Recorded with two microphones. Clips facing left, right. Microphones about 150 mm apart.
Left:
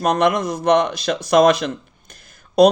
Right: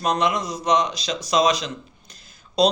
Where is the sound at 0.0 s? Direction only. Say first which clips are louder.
Left 5 dB; 55° left (ahead or behind).